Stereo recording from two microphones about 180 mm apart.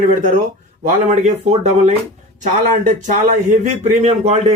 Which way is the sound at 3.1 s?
40° right (ahead or behind).